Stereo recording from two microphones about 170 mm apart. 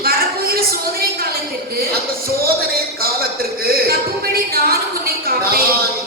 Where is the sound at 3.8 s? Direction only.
65° right (ahead or behind).